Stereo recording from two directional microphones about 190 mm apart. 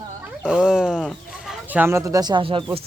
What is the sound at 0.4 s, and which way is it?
Chicken, 5° right (ahead or behind).